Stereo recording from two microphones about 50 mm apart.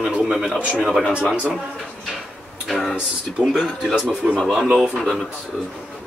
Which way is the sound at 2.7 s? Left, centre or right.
Centre.